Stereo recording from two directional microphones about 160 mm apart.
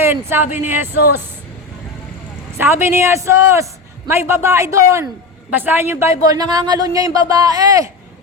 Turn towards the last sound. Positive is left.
turn(degrees=-20)  # may be behind; listen again after turning